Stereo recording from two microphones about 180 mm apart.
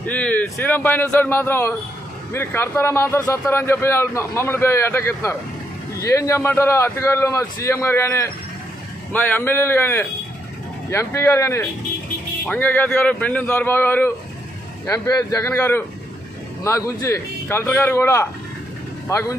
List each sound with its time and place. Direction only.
0.0 s a man's voice: 10° left (ahead or behind)